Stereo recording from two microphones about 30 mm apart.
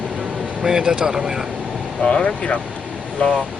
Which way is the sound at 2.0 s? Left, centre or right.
Left.